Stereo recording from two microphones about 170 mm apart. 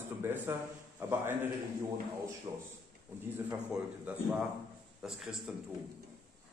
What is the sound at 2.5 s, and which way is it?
Speech, 25° right (ahead or behind).